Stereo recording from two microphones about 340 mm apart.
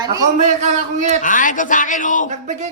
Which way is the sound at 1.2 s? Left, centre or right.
Left.